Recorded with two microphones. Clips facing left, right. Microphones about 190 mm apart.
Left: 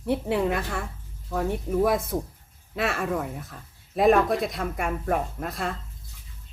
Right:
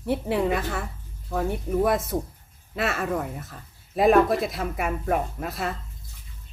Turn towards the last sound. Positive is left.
turn(degrees=0)  # may be behind; listen again after turning